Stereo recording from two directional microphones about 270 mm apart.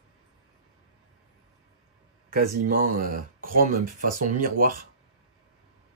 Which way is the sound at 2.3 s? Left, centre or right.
Right.